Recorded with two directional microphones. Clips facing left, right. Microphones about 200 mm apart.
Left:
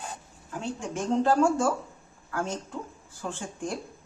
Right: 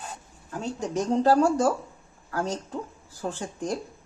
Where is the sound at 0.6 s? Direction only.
40° right (ahead or behind).